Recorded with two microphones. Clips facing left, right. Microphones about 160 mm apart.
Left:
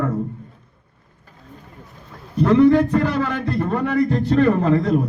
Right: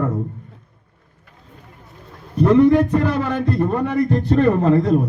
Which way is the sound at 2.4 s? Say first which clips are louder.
Right 1 dB; 15° right (ahead or behind).